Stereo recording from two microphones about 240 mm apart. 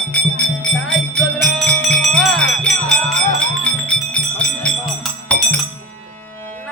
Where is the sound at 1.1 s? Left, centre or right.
Centre.